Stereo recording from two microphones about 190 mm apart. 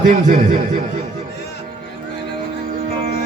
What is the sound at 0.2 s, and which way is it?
Speech, 40° right (ahead or behind).